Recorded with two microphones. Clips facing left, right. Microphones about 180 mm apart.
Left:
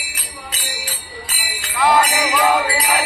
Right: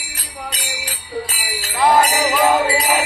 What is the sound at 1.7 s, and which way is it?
Jingle bell, 20° right (ahead or behind).